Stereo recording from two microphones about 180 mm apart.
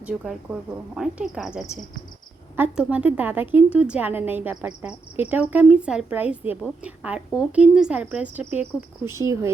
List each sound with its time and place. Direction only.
0.0 s a woman's voice: 5° right (ahead or behind)